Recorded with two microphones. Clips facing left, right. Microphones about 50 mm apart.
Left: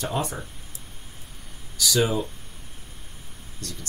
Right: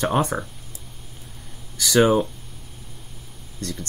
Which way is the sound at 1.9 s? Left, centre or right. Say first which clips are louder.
Right 7 dB; right.